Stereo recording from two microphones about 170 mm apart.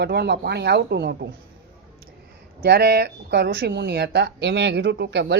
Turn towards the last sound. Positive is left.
turn(degrees=-90)